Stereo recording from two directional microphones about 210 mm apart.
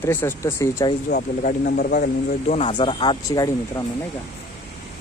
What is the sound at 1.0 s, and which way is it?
Speech, 40° left (ahead or behind).